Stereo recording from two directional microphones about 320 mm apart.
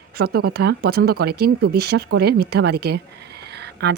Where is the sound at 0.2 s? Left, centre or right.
Right.